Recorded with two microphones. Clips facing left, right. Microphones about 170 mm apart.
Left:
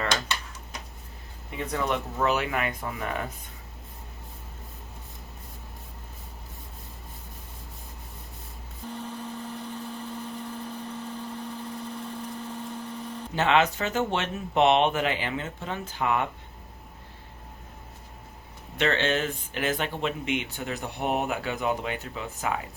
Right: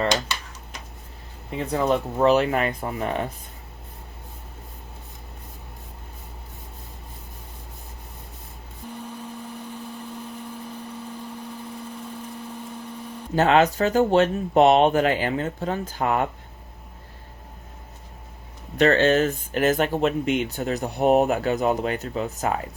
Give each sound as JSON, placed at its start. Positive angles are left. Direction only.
{"t": 1.5, "sound": "speech", "side_deg": -30}
{"t": 8.9, "sound": "vehicle", "side_deg": -10}
{"t": 13.3, "sound": "speech", "side_deg": -40}
{"t": 18.8, "sound": "speech", "side_deg": -40}